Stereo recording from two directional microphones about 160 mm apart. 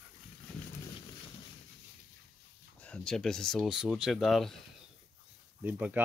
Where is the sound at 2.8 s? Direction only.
5° left (ahead or behind).